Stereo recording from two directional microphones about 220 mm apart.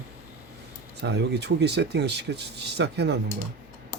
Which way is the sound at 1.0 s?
50° right (ahead or behind).